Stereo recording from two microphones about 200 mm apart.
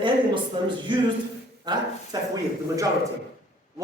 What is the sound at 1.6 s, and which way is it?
Speech, 20° right (ahead or behind).